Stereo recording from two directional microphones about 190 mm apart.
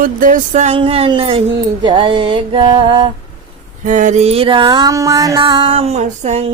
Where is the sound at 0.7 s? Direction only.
30° right (ahead or behind).